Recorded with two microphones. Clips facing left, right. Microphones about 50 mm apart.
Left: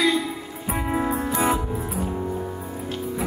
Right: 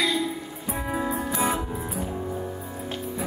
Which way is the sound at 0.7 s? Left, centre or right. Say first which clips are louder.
Left 4 dB; left.